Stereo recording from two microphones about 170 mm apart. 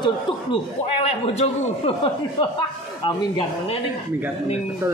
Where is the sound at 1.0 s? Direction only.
40° left (ahead or behind).